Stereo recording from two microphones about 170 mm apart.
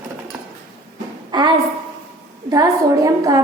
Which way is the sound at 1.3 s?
25° right (ahead or behind).